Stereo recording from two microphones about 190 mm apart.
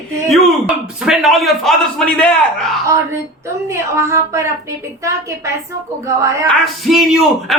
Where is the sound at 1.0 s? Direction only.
Centre (ahead or behind).